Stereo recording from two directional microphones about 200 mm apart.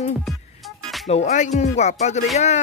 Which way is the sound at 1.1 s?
35° left (ahead or behind).